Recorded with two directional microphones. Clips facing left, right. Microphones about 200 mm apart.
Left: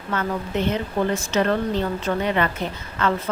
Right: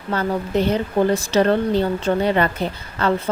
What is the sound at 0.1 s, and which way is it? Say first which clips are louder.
Speech: right 4 dB; 35° right (ahead or behind).